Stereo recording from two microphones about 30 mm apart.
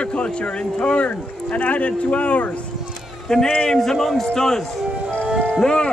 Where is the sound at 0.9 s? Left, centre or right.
Left.